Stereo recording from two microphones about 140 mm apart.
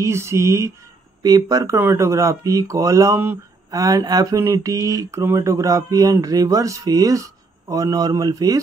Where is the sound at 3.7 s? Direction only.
25° right (ahead or behind).